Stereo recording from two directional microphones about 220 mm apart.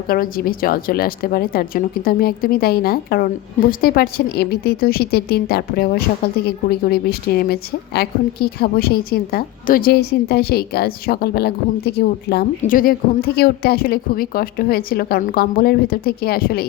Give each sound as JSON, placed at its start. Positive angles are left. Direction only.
{"t": 0.1, "sound": "a woman's voice", "side_deg": 40}